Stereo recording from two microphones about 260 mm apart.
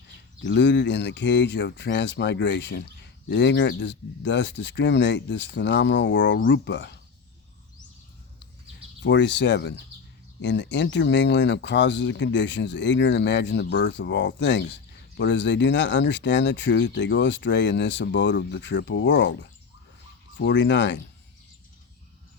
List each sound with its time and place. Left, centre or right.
0.4 s speech: left
9.0 s speech: left